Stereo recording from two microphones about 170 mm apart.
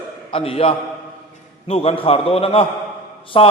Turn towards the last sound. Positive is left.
turn(degrees=35)  # may be behind; listen again after turning